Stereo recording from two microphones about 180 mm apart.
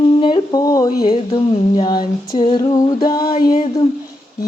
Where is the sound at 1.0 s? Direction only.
30° left (ahead or behind).